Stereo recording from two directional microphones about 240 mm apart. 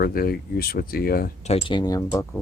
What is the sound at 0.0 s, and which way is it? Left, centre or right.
Speech, left.